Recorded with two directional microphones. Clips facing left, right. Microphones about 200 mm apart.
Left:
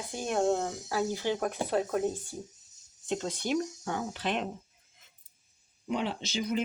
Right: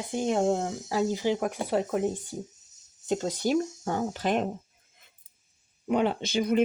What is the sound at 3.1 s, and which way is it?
Speech, 40° right (ahead or behind).